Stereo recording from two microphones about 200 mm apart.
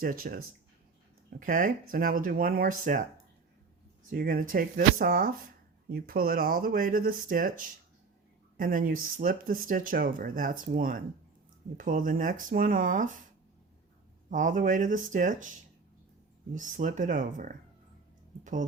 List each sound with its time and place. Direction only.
0.0 s speech: 45° right (ahead or behind)
1.4 s speech: 45° right (ahead or behind)
4.1 s speech: 45° right (ahead or behind)
14.3 s speech: 40° right (ahead or behind)
16.6 s speech: 40° right (ahead or behind)